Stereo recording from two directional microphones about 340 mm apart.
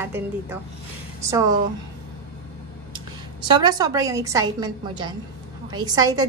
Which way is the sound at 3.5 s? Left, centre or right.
Centre.